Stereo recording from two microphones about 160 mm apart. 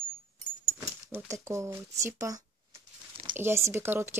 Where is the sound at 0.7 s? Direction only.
20° right (ahead or behind).